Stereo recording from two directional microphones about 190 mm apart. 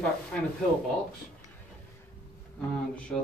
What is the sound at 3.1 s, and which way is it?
Speech, 20° left (ahead or behind).